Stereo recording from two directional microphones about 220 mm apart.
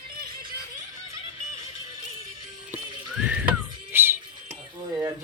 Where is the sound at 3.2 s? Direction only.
5° right (ahead or behind).